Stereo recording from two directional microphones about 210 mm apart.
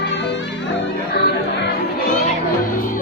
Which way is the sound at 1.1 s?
55° left (ahead or behind).